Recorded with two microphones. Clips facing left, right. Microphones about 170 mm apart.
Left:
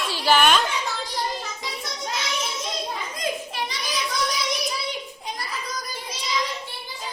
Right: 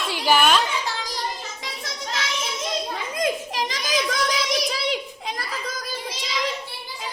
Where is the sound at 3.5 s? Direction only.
90° right.